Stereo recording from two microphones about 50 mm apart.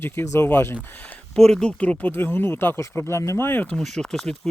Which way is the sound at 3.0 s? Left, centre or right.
Left.